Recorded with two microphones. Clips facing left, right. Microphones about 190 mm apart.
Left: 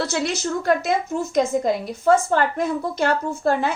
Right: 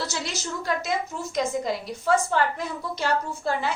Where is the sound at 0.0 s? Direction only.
55° left (ahead or behind).